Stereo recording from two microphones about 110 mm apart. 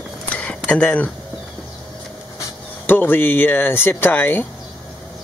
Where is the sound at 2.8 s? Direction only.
20° left (ahead or behind).